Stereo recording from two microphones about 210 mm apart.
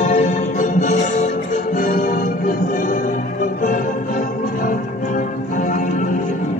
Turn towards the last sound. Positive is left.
turn(degrees=40)  # may be behind; listen again after turning